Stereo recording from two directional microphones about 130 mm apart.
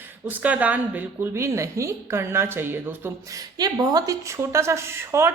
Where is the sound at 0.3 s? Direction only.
10° right (ahead or behind).